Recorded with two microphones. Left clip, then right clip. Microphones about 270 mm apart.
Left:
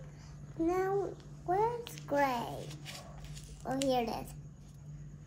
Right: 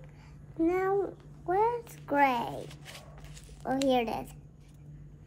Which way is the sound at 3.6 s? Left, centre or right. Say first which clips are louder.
Right 4 dB; right.